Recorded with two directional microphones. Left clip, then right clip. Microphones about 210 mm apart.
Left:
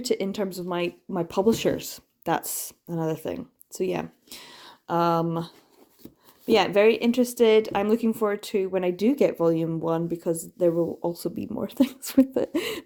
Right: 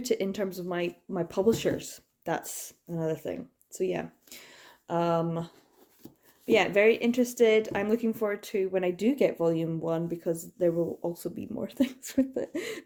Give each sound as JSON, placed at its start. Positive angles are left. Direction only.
{"t": 0.0, "sound": "speech", "side_deg": 25}